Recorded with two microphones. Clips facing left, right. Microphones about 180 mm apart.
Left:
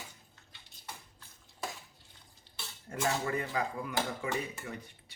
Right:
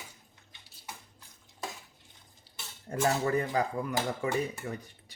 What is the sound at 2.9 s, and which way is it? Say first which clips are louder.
Dishes: right 5 dB; 35° right (ahead or behind).